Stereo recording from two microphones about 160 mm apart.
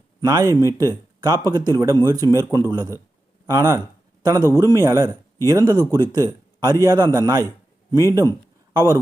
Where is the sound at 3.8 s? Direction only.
25° right (ahead or behind).